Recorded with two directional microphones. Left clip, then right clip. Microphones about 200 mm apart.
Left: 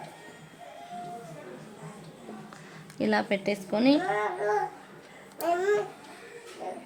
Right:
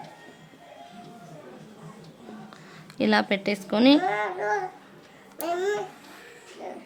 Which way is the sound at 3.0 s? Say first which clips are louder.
Right 4 dB; 15° right (ahead or behind).